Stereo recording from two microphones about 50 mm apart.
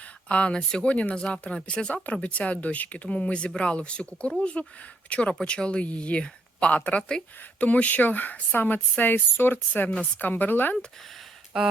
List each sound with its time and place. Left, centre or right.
0.3 s speech: left
5.3 s speech: centre; by 10.8 s left
11.5 s a sound: centre